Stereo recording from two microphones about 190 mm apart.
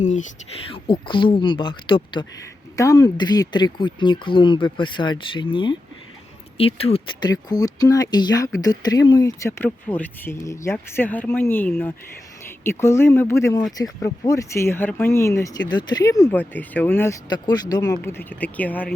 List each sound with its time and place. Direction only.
0.0 s speech: 40° left (ahead or behind)
0.7 s speech: 25° left (ahead or behind); by 18.9 s 10° left (ahead or behind)